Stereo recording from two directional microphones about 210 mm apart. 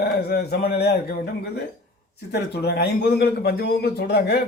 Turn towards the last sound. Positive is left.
turn(degrees=50)  # may be behind; listen again after turning